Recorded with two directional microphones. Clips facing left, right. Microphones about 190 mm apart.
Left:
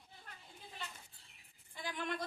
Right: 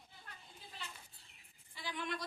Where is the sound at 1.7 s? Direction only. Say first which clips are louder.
Left 1 dB; 50° left (ahead or behind).